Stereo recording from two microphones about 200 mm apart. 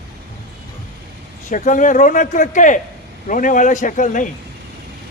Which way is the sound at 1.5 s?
40° left (ahead or behind).